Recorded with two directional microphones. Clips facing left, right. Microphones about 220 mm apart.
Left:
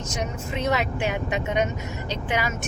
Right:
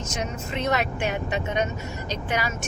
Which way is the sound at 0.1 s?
15° left (ahead or behind).